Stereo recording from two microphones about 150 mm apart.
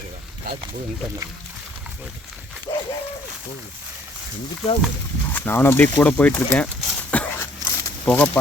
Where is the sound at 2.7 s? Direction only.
40° left (ahead or behind).